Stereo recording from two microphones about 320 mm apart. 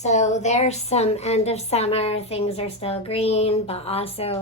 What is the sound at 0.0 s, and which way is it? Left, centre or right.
A woman's voice, left.